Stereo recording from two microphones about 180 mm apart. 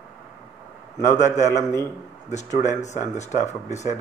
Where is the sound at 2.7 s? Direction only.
40° left (ahead or behind).